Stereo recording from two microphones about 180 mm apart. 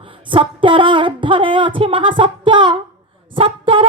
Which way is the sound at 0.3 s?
30° right (ahead or behind).